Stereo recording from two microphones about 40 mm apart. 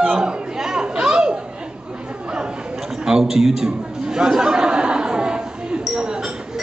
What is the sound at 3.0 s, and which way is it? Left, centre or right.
Speech, centre.